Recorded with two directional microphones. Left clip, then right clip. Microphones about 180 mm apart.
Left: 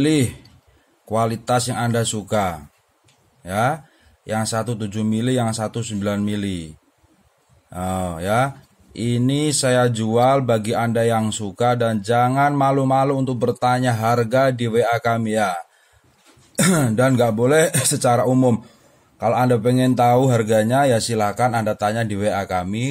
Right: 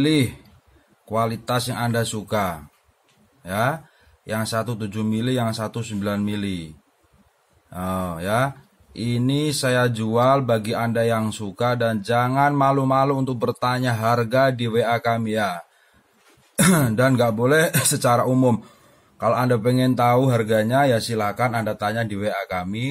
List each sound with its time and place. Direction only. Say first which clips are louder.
0.0 s speech: left 1 dB; 25° left (ahead or behind)
7.7 s speech: left 2 dB; 15° left (ahead or behind)